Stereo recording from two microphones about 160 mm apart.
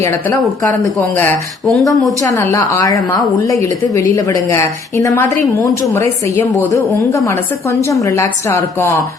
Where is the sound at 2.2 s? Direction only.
15° left (ahead or behind).